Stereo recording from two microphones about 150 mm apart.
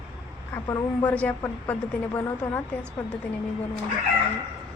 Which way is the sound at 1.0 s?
10° left (ahead or behind).